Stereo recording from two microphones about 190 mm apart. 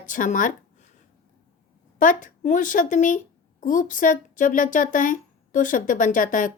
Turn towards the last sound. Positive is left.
turn(degrees=45)  # may be behind; listen again after turning